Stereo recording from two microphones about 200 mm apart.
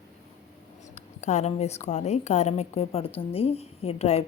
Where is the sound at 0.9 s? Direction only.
35° left (ahead or behind).